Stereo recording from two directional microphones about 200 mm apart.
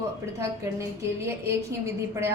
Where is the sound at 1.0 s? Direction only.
15° right (ahead or behind).